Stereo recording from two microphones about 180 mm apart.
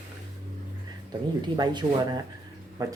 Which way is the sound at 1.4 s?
25° right (ahead or behind).